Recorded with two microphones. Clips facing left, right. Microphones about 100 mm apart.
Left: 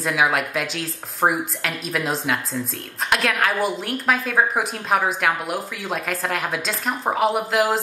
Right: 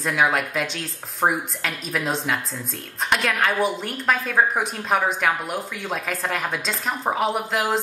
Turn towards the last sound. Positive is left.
turn(degrees=0)  # may be behind; listen again after turning